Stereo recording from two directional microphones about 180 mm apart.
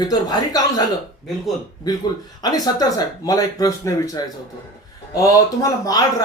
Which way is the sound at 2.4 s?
20° left (ahead or behind).